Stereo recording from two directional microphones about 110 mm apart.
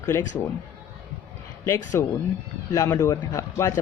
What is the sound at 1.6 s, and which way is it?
Speech, 25° left (ahead or behind).